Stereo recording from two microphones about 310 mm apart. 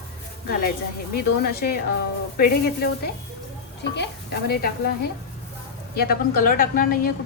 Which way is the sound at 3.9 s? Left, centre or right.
Left.